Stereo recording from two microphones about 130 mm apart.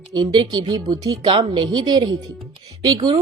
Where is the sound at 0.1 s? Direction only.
35° right (ahead or behind).